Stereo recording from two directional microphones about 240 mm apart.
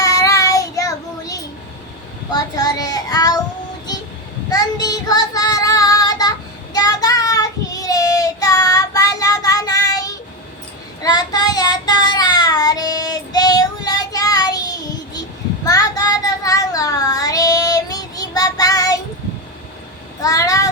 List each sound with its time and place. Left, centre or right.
0.0 s child singing: centre
4.4 s child singing: centre
20.2 s meow: centre